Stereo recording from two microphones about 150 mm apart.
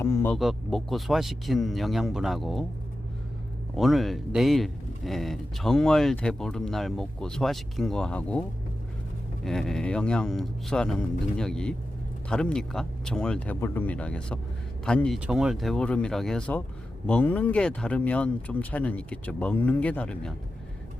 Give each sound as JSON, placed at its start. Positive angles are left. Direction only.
{"t": 0.0, "sound": "a sound", "side_deg": 15}
{"t": 0.3, "sound": "speech", "side_deg": 0}
{"t": 3.8, "sound": "speech", "side_deg": 0}